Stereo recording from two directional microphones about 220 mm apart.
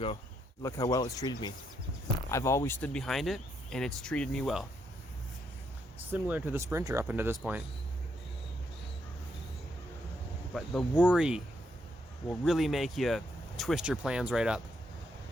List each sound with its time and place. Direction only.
0.6 s speech: 15° left (ahead or behind)
6.0 s speech: 10° right (ahead or behind)
10.5 s speech: centre (ahead or behind)